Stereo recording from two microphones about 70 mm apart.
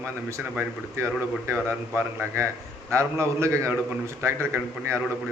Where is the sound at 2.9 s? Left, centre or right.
Right.